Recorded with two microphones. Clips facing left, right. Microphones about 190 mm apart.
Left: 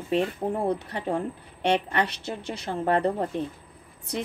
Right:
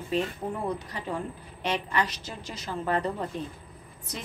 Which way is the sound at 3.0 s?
50° left (ahead or behind).